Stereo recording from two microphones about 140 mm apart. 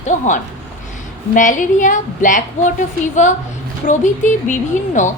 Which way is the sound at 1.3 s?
65° left (ahead or behind).